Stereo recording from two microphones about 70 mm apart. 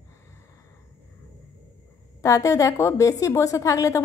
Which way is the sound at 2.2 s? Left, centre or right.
Left.